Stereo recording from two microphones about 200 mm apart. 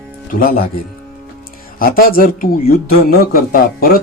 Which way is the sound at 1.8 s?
45° left (ahead or behind).